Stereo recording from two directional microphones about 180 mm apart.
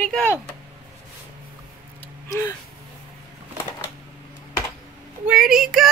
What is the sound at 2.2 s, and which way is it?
Speech, 15° left (ahead or behind).